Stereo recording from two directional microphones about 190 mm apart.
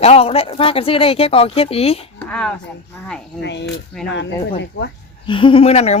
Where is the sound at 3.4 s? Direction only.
65° left (ahead or behind).